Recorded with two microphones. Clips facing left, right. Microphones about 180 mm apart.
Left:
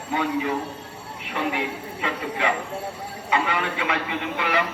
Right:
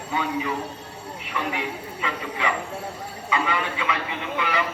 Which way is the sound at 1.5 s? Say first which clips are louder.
Left 2 dB; 60° left (ahead or behind).